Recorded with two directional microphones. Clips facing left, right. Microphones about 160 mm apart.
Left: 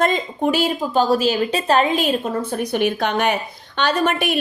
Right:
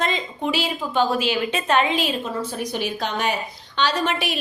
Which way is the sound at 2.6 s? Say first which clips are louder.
Left 6 dB; 60° left (ahead or behind).